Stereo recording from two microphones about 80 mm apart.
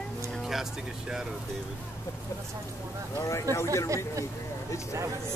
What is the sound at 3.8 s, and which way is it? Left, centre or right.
Speech, right.